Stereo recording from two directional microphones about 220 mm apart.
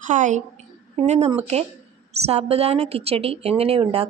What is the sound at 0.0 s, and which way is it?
A woman's voice, 35° right (ahead or behind).